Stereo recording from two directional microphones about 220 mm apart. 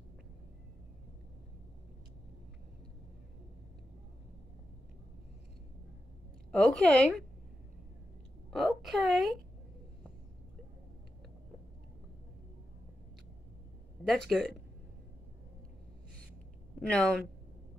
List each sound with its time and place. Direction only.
6.5 s a woman's voice: centre (ahead or behind)
8.5 s a woman's voice: centre (ahead or behind)
14.0 s a woman's voice: centre (ahead or behind)
16.9 s a woman's voice: 5° left (ahead or behind)